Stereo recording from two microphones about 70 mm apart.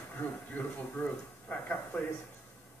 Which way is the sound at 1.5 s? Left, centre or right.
Centre.